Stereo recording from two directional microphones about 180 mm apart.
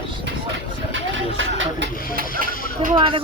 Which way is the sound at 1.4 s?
90° right.